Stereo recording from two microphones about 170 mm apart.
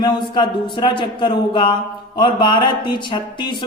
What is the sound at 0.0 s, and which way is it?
Speech, 25° left (ahead or behind).